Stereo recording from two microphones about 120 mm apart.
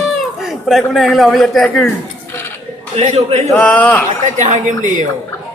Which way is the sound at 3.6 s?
10° left (ahead or behind).